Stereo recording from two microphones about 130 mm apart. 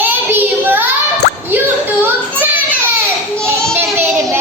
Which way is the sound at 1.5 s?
15° right (ahead or behind).